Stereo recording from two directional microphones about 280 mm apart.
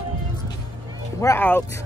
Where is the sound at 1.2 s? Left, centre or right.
Centre.